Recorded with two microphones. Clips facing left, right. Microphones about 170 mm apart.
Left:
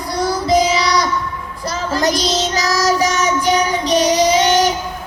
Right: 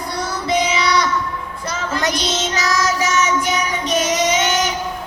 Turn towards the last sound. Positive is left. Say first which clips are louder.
# left 5 dB
turn(degrees=35)  # may be behind; listen again after turning